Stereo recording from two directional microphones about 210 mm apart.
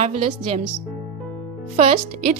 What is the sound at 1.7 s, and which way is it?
Speech, 30° right (ahead or behind).